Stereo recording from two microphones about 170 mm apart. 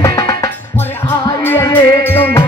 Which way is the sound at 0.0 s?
20° left (ahead or behind).